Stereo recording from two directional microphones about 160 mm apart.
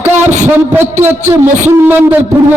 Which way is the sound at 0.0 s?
15° right (ahead or behind).